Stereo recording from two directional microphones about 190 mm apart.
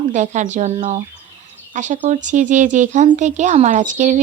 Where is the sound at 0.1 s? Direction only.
40° right (ahead or behind).